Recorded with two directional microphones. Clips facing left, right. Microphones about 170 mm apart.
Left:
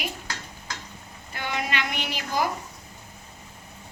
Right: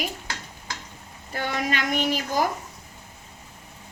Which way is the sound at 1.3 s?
40° right (ahead or behind).